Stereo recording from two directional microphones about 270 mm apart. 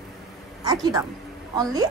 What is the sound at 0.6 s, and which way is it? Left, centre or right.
Speech, centre.